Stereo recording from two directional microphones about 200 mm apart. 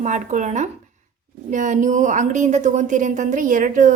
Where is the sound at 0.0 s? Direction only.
40° right (ahead or behind).